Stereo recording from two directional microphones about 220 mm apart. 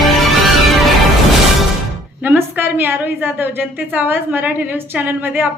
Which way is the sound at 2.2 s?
10° right (ahead or behind).